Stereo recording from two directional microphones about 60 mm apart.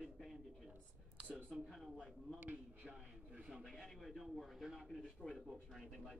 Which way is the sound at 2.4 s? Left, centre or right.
Right.